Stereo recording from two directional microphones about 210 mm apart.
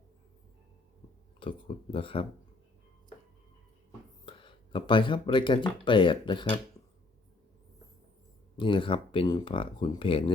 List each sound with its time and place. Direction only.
1.4 s speech: 25° left (ahead or behind)
4.3 s speech: 25° left (ahead or behind)
8.5 s speech: 25° left (ahead or behind)